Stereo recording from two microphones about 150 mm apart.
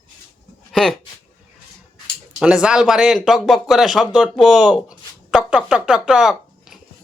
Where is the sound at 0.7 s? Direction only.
Centre (ahead or behind).